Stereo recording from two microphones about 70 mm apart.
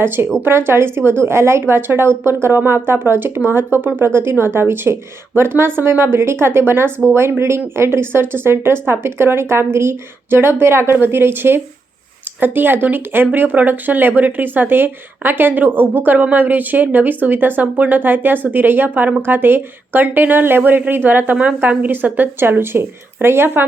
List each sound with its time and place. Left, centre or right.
0.4 s a woman's voice: right